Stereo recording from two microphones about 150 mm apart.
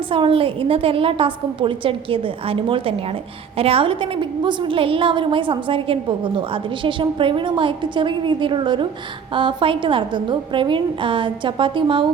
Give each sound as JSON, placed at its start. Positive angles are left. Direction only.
{"t": 0.1, "sound": "a woman's voice", "side_deg": -35}